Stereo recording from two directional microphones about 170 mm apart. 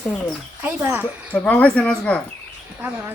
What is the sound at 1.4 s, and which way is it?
Speech, 10° left (ahead or behind).